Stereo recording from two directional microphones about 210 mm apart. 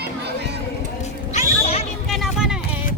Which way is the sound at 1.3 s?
30° left (ahead or behind).